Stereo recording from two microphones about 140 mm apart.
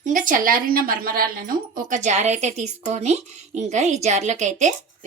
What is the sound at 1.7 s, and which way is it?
Speech, 65° right (ahead or behind).